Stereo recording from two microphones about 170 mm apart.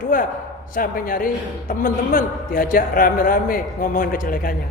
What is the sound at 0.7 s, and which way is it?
A man's voice, 55° left (ahead or behind).